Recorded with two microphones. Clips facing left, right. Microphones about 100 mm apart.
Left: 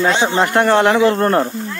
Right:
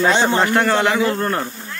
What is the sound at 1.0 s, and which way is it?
Speech, 40° left (ahead or behind).